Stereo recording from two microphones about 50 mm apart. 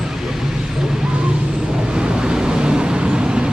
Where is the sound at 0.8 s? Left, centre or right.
Centre.